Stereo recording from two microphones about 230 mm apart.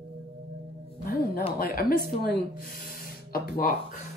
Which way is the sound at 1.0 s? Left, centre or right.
Left.